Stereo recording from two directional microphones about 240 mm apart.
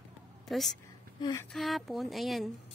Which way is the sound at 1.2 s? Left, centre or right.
Centre.